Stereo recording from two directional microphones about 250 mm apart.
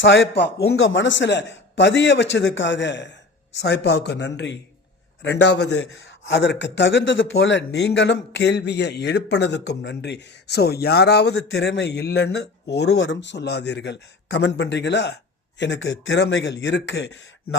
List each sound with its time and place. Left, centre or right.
0.0 s a man's voice: left